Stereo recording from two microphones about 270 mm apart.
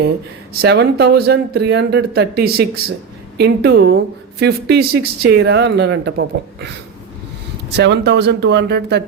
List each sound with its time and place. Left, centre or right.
0.6 s speech: right
7.8 s speech: right